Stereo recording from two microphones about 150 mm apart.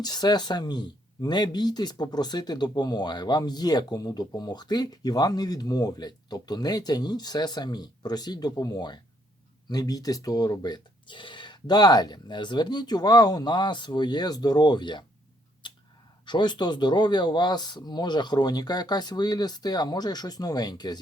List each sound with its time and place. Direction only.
0.0 s speech: 25° left (ahead or behind)
15.6 s a sound: 30° left (ahead or behind)
16.2 s speech: 30° left (ahead or behind)